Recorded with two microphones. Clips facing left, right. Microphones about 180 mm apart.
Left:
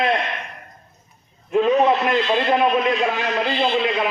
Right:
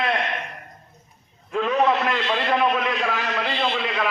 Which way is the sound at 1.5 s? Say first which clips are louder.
Left 4 dB; 25° left (ahead or behind).